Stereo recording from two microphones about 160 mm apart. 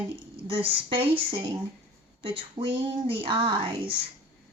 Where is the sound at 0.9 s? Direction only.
35° right (ahead or behind).